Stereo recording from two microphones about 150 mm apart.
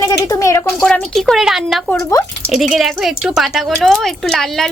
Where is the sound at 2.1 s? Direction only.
20° left (ahead or behind).